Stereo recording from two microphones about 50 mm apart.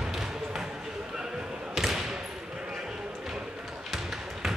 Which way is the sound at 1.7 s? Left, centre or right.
Centre.